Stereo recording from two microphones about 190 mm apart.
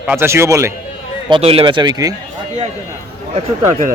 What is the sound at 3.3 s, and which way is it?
Speech, 40° right (ahead or behind).